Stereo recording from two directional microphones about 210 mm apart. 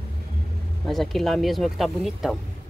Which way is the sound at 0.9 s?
Centre (ahead or behind).